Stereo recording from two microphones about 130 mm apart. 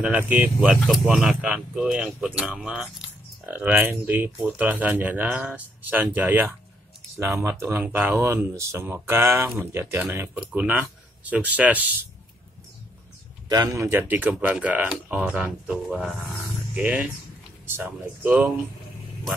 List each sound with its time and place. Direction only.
0.0 s speech: 10° right (ahead or behind)
13.5 s speech: 30° right (ahead or behind); by 18.5 s 10° right (ahead or behind)